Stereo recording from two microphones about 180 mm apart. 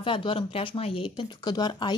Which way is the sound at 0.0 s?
30° left (ahead or behind).